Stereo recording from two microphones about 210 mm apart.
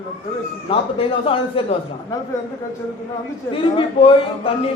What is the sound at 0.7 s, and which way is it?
Speech, 25° left (ahead or behind).